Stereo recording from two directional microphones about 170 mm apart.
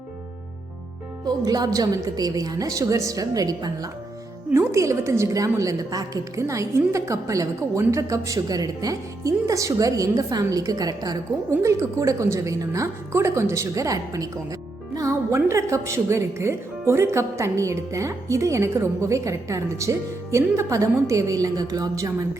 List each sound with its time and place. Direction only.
1.2 s a woman's voice: 25° right (ahead or behind)